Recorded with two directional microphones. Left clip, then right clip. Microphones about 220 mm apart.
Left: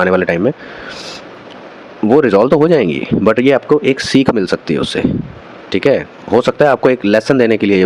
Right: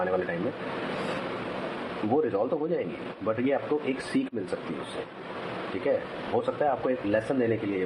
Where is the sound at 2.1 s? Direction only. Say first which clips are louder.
Left 18 dB; 55° left (ahead or behind).